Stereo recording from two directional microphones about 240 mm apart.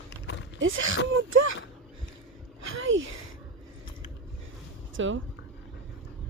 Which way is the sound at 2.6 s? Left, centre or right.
Right.